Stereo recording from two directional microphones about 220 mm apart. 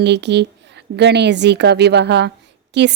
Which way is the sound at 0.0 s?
50° right (ahead or behind).